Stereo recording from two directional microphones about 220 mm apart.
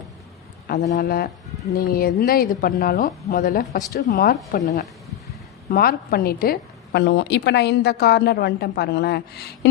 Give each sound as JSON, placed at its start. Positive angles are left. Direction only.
{"t": 0.7, "sound": "a woman's voice", "side_deg": 40}